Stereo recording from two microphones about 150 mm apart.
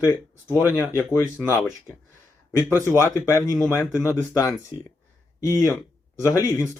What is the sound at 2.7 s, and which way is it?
Speech, 15° right (ahead or behind).